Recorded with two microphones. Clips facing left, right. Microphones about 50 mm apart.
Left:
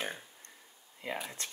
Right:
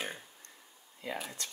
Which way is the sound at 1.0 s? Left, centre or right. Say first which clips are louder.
Left 1 dB; left.